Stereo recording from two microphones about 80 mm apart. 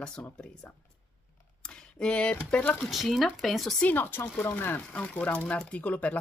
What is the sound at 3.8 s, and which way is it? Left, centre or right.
Speech, left.